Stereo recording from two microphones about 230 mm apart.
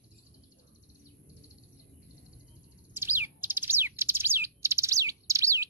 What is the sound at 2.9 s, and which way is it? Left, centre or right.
Bird, centre.